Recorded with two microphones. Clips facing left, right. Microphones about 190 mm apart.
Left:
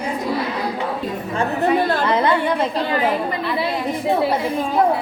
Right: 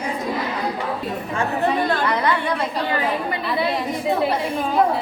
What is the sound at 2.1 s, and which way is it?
Speech, 25° left (ahead or behind).